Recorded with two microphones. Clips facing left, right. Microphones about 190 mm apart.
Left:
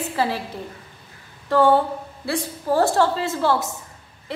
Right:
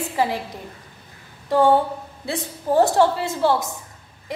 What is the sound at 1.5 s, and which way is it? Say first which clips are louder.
A woman's voice: even; 15° right (ahead or behind).